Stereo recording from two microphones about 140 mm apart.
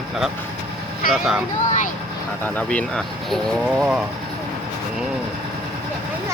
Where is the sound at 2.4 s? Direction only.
10° left (ahead or behind).